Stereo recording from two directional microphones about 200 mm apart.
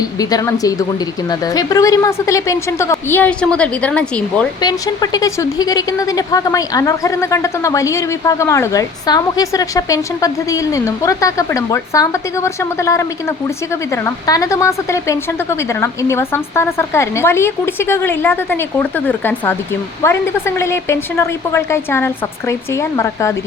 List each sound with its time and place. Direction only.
0.0 s speech: 20° left (ahead or behind)
4.6 s speech: 20° left (ahead or behind)